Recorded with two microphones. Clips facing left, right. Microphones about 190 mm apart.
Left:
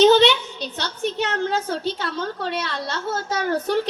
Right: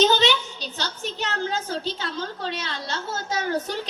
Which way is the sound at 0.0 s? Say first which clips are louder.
Left 6 dB; 60° left (ahead or behind).